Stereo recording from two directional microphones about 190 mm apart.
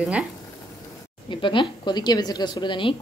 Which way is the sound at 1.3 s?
25° left (ahead or behind).